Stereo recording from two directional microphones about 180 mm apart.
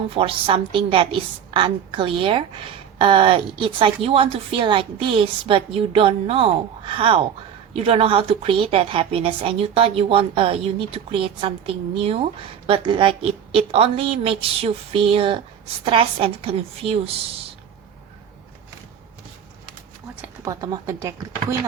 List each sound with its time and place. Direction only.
0.1 s a woman's voice: 30° right (ahead or behind)
20.4 s speech: 20° right (ahead or behind)